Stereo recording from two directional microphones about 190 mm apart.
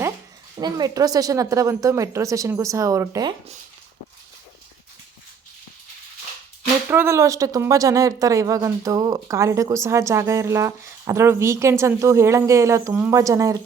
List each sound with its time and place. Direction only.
0.6 s speech: 20° right (ahead or behind)
6.9 s speech: 15° right (ahead or behind)